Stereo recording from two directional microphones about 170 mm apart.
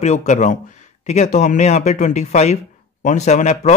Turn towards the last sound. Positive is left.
turn(degrees=40)  # may be behind; listen again after turning